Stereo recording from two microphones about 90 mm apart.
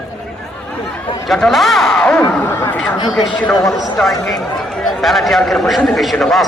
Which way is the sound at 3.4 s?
5° left (ahead or behind).